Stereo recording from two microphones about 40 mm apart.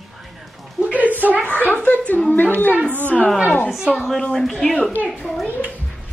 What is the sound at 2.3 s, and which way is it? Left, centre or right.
Speech, left.